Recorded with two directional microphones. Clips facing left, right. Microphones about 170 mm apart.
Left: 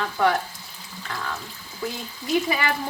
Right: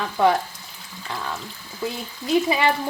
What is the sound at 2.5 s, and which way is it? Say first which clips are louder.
Speech: right 5 dB; 25° right (ahead or behind).